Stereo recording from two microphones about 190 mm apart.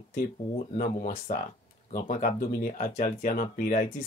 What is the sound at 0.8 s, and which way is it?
Speech, 50° left (ahead or behind).